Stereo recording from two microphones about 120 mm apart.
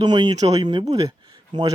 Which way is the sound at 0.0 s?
40° right (ahead or behind).